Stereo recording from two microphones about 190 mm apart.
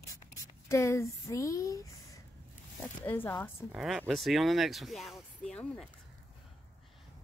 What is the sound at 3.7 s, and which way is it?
Speech, centre (ahead or behind).